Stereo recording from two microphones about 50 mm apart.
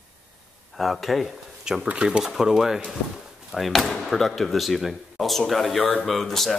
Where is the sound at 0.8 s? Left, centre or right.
Centre.